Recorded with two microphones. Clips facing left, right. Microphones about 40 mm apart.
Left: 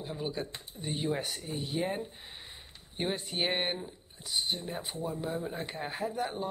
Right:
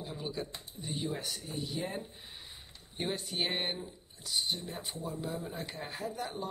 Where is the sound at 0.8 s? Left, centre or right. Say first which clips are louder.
Left 4 dB; left.